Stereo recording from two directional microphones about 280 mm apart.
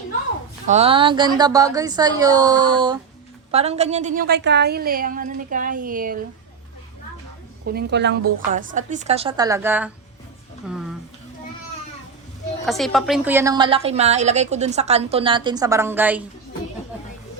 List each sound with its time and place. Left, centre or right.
0.7 s a woman's voice: right
7.6 s a woman's voice: right; by 9.9 s centre
10.7 s a sound: centre
12.6 s a woman's voice: centre